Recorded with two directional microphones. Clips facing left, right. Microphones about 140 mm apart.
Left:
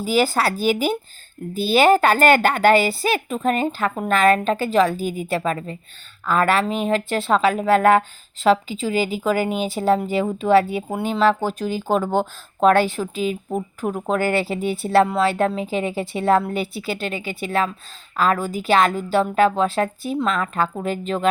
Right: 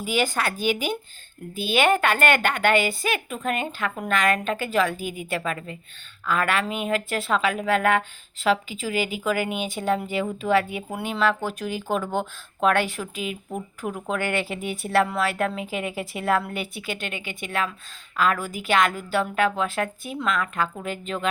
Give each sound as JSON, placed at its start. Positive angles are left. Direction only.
{"t": 0.0, "sound": "speech", "side_deg": 35}